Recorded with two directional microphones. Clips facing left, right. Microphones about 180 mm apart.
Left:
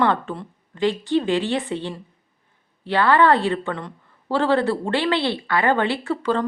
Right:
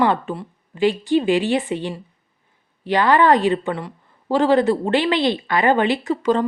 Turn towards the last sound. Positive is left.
turn(degrees=-15)  # may be behind; listen again after turning